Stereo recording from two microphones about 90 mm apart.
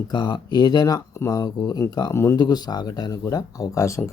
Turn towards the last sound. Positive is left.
turn(degrees=35)  # may be behind; listen again after turning